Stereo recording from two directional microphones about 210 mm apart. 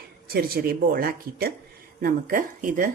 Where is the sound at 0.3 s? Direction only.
45° right (ahead or behind).